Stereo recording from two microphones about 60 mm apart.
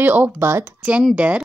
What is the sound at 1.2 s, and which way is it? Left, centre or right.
Speech, right.